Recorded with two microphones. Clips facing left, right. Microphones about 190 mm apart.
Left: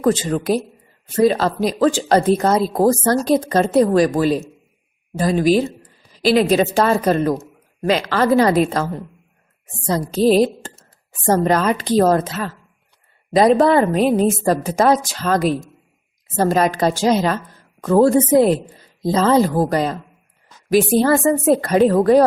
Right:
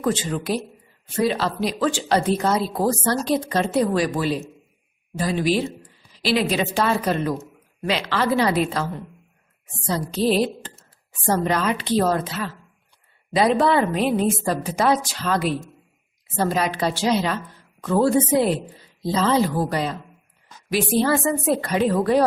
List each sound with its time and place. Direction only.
0.0 s a woman's voice: 45° left (ahead or behind)